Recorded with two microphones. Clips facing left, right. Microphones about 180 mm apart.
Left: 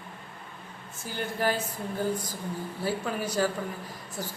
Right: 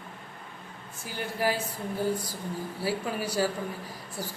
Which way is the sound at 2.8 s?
10° right (ahead or behind).